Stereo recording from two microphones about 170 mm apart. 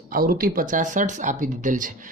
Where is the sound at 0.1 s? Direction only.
55° right (ahead or behind).